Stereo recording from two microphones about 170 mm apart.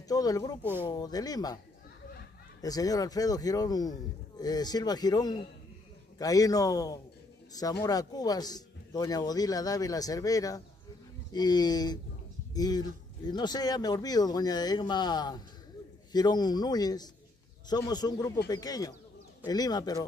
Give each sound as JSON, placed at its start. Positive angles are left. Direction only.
{"t": 0.1, "sound": "a man's voice", "side_deg": 20}
{"t": 2.6, "sound": "a man's voice", "side_deg": 20}